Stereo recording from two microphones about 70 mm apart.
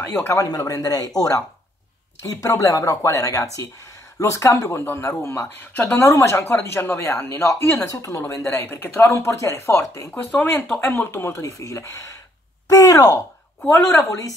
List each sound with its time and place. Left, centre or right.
0.0 s speech: left
0.5 s speech: left
4.6 s speech: left
5.9 s speech: left
7.8 s speech: left
8.2 s speech: left
10.1 s speech: left
12.6 s speech: left
13.7 s speech: left